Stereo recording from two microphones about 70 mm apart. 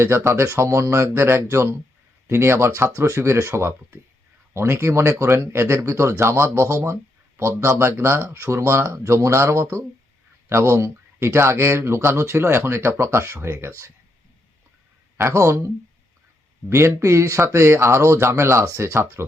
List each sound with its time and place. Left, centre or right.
0.0 s speech: right
15.2 s speech: right